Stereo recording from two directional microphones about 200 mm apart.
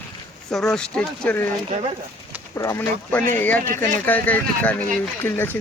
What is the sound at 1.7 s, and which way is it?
Speech, 35° right (ahead or behind).